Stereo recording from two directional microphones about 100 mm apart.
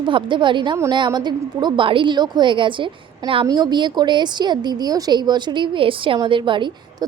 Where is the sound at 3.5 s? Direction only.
45° right (ahead or behind).